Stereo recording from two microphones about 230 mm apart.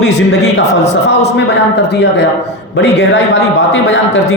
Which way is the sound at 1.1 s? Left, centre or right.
Left.